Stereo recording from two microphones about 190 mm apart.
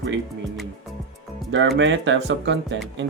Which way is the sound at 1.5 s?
70° right (ahead or behind).